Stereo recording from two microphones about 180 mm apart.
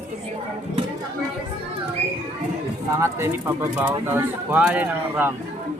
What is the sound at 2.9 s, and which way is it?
Speech, 15° right (ahead or behind).